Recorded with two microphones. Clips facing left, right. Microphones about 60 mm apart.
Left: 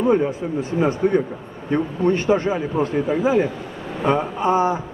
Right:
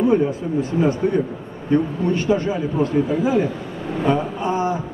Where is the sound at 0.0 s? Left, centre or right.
Left.